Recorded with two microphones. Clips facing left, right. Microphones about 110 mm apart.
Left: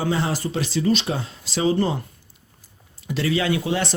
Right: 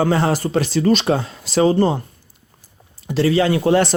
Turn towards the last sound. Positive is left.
turn(degrees=-35)  # may be behind; listen again after turning